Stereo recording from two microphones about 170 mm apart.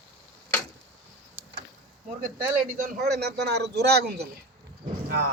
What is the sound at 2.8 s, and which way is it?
A man's voice, 65° right (ahead or behind).